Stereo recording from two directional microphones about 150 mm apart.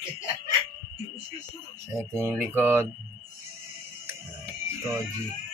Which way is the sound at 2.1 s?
15° right (ahead or behind).